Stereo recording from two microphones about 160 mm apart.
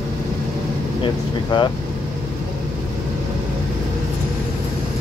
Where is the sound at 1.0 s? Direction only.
30° left (ahead or behind).